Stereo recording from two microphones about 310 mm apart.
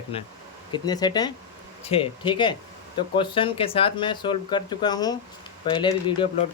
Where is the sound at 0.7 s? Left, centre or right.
Centre.